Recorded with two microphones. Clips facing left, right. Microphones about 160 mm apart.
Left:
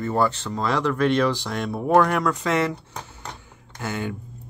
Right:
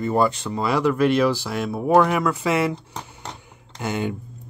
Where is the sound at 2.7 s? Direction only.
15° right (ahead or behind).